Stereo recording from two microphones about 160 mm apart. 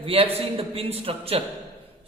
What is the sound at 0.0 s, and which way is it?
A man's voice, 35° right (ahead or behind).